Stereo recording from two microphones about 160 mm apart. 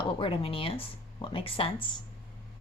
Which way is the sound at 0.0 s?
35° left (ahead or behind).